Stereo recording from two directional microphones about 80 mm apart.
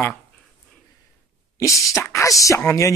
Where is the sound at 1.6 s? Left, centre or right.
Left.